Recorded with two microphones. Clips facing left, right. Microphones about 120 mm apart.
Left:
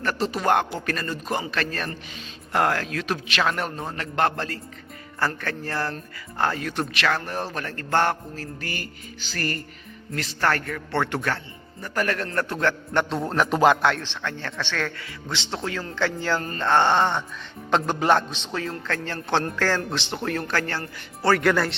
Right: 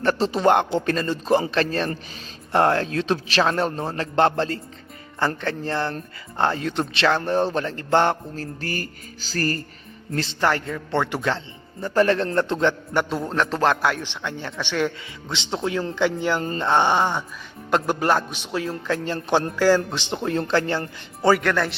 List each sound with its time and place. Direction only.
0.0 s a man's voice: 30° right (ahead or behind)
8.6 s music: 40° right (ahead or behind)
10.4 s a man's voice: 20° right (ahead or behind)
12.9 s a man's voice: 5° right (ahead or behind)
14.0 s a man's voice: 15° right (ahead or behind)
21.4 s a man's voice: centre (ahead or behind)